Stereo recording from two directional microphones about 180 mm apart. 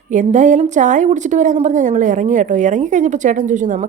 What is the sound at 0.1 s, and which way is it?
A woman's voice, 45° right (ahead or behind).